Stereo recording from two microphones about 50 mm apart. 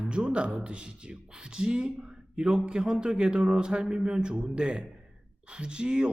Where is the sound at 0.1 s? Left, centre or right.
Right.